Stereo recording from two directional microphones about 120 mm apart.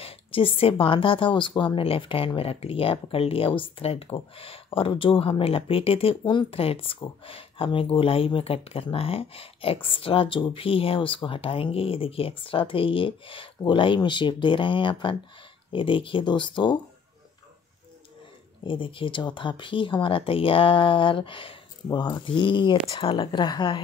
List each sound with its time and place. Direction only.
0.0 s a woman's voice: 50° left (ahead or behind)
18.6 s a woman's voice: 45° left (ahead or behind)